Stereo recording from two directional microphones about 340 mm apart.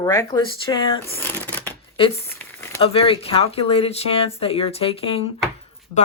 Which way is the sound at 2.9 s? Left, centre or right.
Centre.